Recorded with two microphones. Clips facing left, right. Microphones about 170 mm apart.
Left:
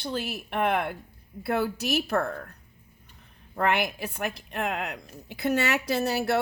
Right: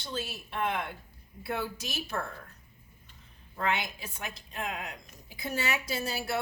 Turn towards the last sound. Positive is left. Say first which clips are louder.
# left 8 dB
turn(degrees=70)  # may be behind; listen again after turning